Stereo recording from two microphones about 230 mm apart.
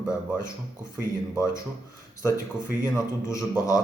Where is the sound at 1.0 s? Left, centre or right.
Centre.